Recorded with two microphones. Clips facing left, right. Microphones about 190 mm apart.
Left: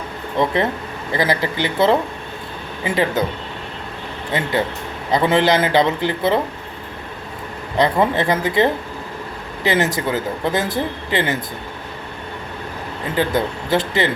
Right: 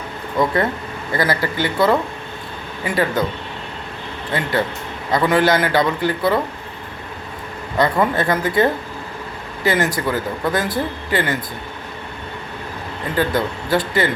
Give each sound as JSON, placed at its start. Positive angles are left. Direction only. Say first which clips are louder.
{"t": 0.3, "sound": "speech", "louder": "even", "side_deg": 20}
{"t": 4.3, "sound": "speech", "louder": "even", "side_deg": 20}
{"t": 7.8, "sound": "speech", "louder": "left 1 dB", "side_deg": 20}
{"t": 13.1, "sound": "speech", "louder": "even", "side_deg": 20}